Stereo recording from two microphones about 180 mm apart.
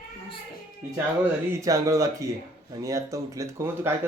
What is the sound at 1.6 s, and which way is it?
Speech, 20° right (ahead or behind).